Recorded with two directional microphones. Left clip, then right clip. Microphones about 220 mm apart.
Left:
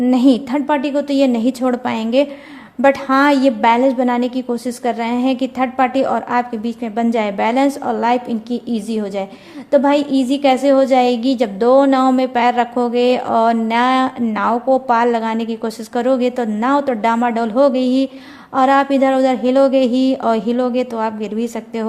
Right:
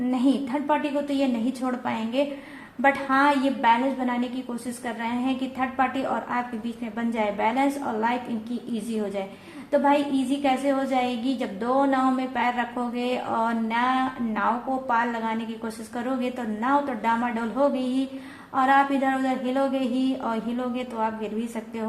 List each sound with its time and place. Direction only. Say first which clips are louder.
0.1 s a woman's voice: left 9 dB; 50° left (ahead or behind)